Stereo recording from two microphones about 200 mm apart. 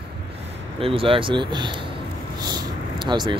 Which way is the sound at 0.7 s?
30° right (ahead or behind).